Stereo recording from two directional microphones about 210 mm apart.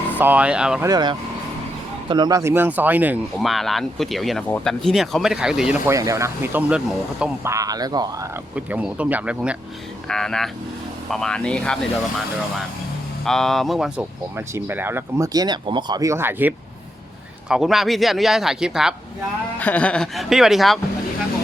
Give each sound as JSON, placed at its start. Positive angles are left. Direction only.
{"t": 0.2, "sound": "speech", "side_deg": -5}
{"t": 0.9, "sound": "speech", "side_deg": -20}
{"t": 7.5, "sound": "speech", "side_deg": -15}
{"t": 8.5, "sound": "speech", "side_deg": -5}
{"t": 13.2, "sound": "speech", "side_deg": 0}